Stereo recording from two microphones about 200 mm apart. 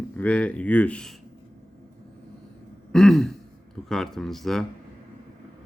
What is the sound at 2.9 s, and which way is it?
Throat clearing, centre (ahead or behind).